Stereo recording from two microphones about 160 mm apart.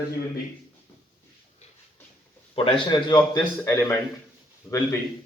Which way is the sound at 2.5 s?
35° left (ahead or behind).